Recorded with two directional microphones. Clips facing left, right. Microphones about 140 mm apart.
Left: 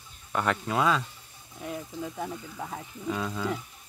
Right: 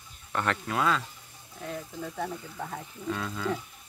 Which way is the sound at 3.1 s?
15° left (ahead or behind).